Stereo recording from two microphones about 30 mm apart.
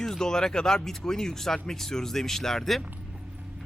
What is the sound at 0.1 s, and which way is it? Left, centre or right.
Speech, left.